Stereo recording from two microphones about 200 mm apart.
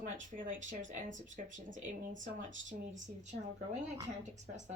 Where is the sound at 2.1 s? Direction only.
70° right (ahead or behind).